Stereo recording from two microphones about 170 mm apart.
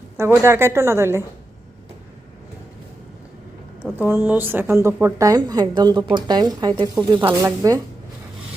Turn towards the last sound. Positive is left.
turn(degrees=-20)  # may be behind; listen again after turning